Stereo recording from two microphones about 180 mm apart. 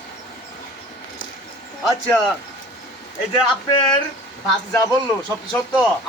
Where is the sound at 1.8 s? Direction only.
5° left (ahead or behind).